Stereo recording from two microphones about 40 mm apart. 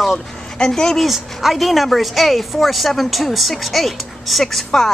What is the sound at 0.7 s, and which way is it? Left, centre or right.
Speech, centre.